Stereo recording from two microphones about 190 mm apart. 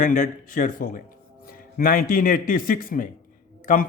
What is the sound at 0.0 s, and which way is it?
A man's voice, 45° left (ahead or behind).